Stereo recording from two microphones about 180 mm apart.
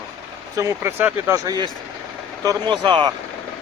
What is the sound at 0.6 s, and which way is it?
Speech, 15° right (ahead or behind).